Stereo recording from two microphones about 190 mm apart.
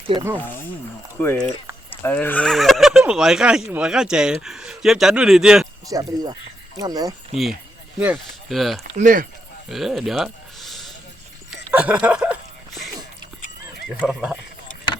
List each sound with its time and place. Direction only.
0.3 s speech: 10° left (ahead or behind)
5.9 s speech: 20° right (ahead or behind)
7.9 s speech: 5° right (ahead or behind)
9.0 s speech: 45° right (ahead or behind)
9.6 s a sound: centre (ahead or behind)
14.1 s speech: 5° right (ahead or behind)